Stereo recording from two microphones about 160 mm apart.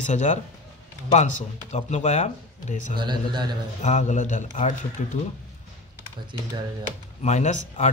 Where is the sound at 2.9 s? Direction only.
30° right (ahead or behind).